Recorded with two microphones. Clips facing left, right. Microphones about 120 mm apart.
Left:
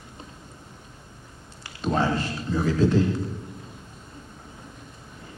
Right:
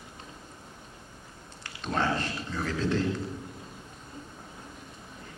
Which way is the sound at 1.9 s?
10° left (ahead or behind).